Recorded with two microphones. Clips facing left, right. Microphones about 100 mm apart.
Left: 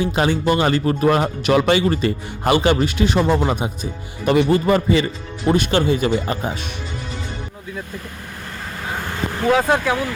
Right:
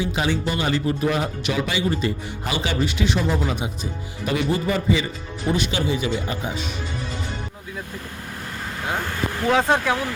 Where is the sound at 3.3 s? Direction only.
70° left (ahead or behind).